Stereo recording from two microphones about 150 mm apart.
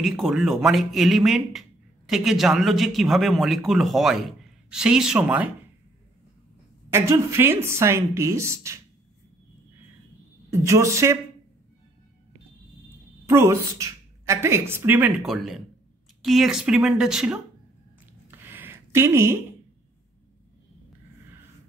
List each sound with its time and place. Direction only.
0.0 s speech: centre (ahead or behind)
6.9 s a woman's voice: 15° right (ahead or behind)
10.5 s a woman's voice: 20° right (ahead or behind)
13.3 s a woman's voice: 20° right (ahead or behind)
15.2 s speech: centre (ahead or behind)
18.3 s a sound: 15° right (ahead or behind)